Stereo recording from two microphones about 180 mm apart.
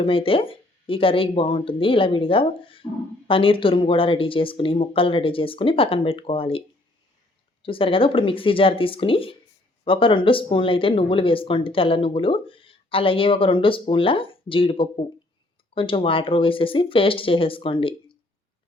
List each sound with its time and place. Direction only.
0.0 s speech: 30° left (ahead or behind)
7.6 s speech: 30° left (ahead or behind)